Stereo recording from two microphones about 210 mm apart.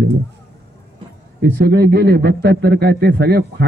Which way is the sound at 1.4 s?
50° right (ahead or behind).